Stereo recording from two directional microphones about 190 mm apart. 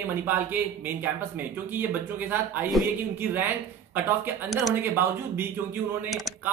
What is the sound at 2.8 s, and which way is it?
Bell, centre (ahead or behind).